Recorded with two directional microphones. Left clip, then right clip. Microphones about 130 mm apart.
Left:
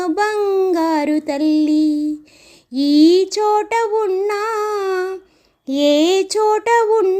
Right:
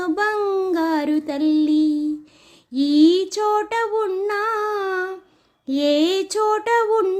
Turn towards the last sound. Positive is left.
turn(degrees=20)  # may be behind; listen again after turning